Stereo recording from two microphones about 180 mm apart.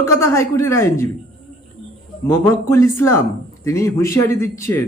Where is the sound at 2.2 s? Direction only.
15° left (ahead or behind).